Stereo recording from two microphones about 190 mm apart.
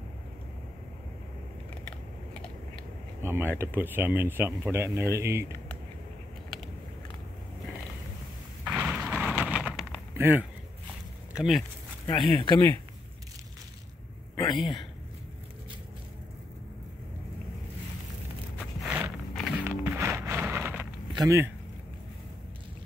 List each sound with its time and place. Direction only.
3.2 s speech: 10° right (ahead or behind)
8.6 s a sound: 5° right (ahead or behind)
10.1 s speech: 10° right (ahead or behind)
12.3 s speech: 20° left (ahead or behind)
14.3 s a sound: 20° left (ahead or behind)
14.6 s speech: centre (ahead or behind)
18.6 s walk: 5° right (ahead or behind)
19.6 s music: 15° right (ahead or behind)
21.1 s speech: 20° right (ahead or behind)